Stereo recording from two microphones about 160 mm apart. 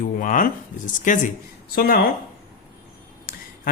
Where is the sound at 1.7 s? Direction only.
70° left (ahead or behind).